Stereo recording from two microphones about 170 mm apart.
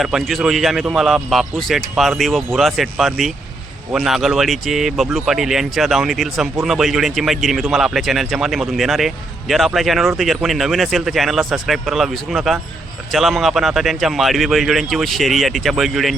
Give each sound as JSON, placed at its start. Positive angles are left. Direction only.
{"t": 0.0, "sound": "speech", "side_deg": 0}